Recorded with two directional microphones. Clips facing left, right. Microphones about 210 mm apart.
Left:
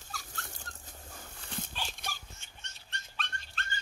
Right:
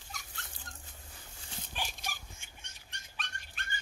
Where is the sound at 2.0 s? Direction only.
55° left (ahead or behind).